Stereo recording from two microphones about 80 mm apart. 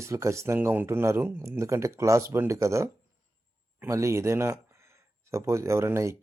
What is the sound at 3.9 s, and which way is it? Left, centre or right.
Speech, right.